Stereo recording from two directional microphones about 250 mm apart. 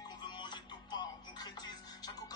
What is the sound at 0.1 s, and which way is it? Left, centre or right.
Music, centre.